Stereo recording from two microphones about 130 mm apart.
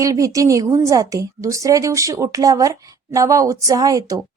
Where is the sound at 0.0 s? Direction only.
25° right (ahead or behind).